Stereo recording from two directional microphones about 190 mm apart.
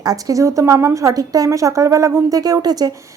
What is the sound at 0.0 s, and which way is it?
A woman's voice, 20° right (ahead or behind).